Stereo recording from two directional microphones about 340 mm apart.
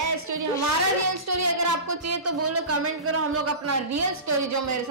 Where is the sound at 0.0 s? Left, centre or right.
Right.